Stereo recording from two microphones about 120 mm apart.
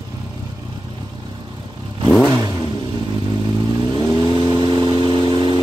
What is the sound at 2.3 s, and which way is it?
Vehicle, 30° right (ahead or behind).